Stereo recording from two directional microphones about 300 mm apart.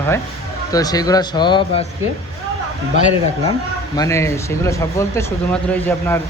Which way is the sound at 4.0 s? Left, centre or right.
Centre.